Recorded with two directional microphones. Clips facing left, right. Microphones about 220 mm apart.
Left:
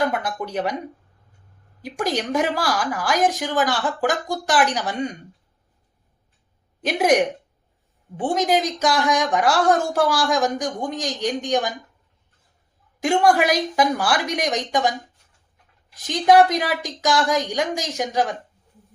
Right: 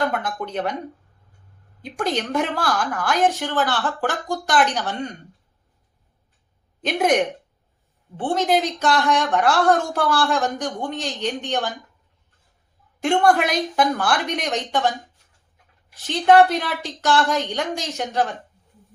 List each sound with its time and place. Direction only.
0.0 s a woman's voice: 5° left (ahead or behind)
1.8 s a woman's voice: 10° left (ahead or behind)
6.8 s a woman's voice: 10° left (ahead or behind)
13.0 s a woman's voice: 10° left (ahead or behind)
16.0 s a woman's voice: 15° left (ahead or behind)